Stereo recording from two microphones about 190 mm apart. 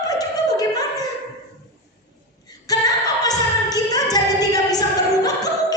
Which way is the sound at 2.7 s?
20° left (ahead or behind).